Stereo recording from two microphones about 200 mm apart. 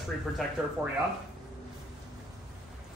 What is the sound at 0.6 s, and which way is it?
Speech, 5° right (ahead or behind).